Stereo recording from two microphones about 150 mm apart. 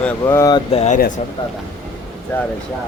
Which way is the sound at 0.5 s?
40° left (ahead or behind).